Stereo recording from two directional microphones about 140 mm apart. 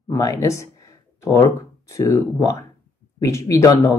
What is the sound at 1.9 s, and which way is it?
Speech, 20° left (ahead or behind).